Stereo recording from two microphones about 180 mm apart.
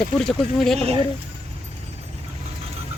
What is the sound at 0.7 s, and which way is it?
Speech, 35° right (ahead or behind).